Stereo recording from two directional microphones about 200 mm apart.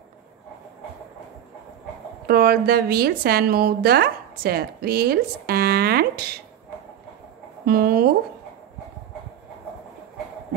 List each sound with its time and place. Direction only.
2.2 s a woman's voice: 50° right (ahead or behind)
7.6 s a woman's voice: 50° right (ahead or behind)